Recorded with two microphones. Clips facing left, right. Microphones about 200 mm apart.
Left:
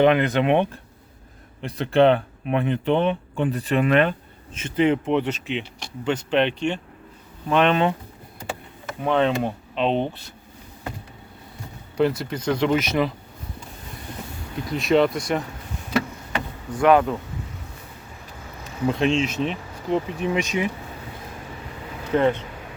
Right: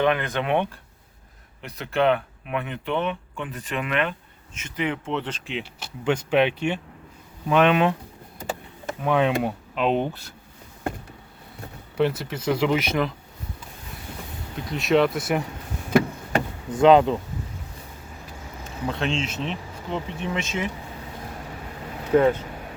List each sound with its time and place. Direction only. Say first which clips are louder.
0.0 s speech: left 5 dB; 20° left (ahead or behind)
5.0 s speech: left 6 dB; 10° left (ahead or behind)
9.0 s speech: left 1 dB; 10° right (ahead or behind)
11.9 s speech: left 2 dB; centre (ahead or behind)
14.7 s speech: left 1 dB; centre (ahead or behind)
16.8 s speech: right 2 dB; 20° right (ahead or behind)
18.9 s speech: left 6 dB; 5° left (ahead or behind)
20.4 s speech: left 4 dB; 15° left (ahead or behind)
22.1 s speech: right 2 dB; 5° right (ahead or behind)